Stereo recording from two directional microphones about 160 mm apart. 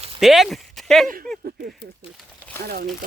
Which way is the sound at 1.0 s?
60° right (ahead or behind).